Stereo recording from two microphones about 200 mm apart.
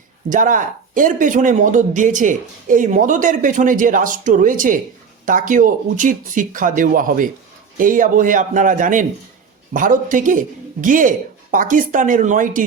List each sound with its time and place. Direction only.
0.3 s a man's voice: 40° right (ahead or behind)